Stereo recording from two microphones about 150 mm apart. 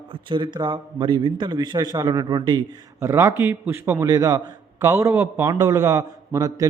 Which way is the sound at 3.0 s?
20° right (ahead or behind).